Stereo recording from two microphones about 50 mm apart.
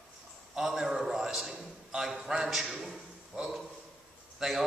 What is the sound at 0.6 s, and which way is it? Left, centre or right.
A man's voice, centre.